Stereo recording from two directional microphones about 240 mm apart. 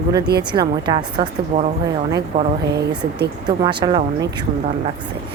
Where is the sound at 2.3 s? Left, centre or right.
Right.